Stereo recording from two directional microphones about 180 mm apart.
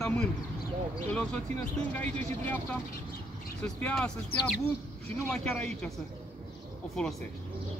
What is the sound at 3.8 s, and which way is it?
Speech, 5° left (ahead or behind).